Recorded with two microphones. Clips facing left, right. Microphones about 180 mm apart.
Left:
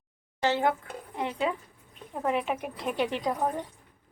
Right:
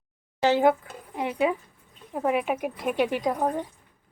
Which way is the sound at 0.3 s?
15° right (ahead or behind).